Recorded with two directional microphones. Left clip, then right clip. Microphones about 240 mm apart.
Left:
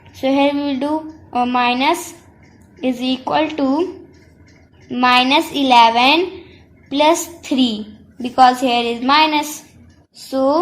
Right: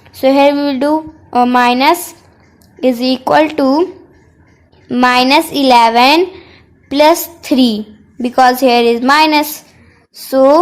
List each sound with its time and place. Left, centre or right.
0.2 s a woman's voice: right
4.9 s a woman's voice: right